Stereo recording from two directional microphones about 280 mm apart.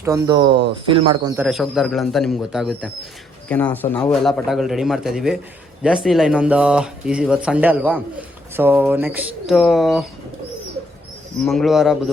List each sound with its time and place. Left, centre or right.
0.0 s speech: centre
1.5 s speech: centre
11.4 s speech: centre